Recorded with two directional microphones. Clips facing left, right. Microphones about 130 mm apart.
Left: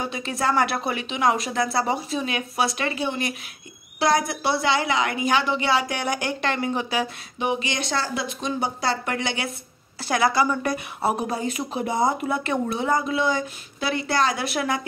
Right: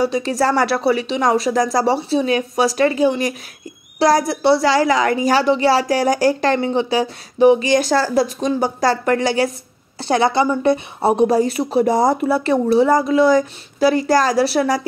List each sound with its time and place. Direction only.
0.0 s a woman's voice: 35° right (ahead or behind)